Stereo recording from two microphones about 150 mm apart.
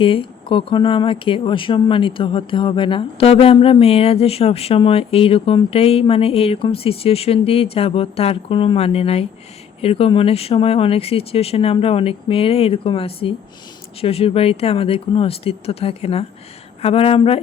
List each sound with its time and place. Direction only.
0.0 s speech: 35° left (ahead or behind)